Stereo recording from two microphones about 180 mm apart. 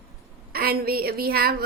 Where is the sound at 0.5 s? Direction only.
55° right (ahead or behind).